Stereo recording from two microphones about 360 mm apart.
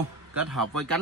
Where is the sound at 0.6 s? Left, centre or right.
Right.